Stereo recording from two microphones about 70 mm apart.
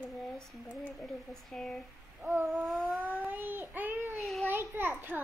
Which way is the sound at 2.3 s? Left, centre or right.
Right.